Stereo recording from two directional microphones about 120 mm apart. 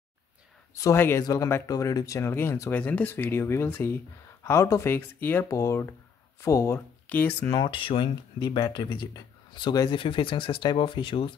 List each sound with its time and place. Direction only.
0.7 s speech: 25° left (ahead or behind)
7.5 s speech: 40° left (ahead or behind)